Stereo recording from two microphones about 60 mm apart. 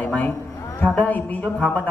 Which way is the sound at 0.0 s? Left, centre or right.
Left.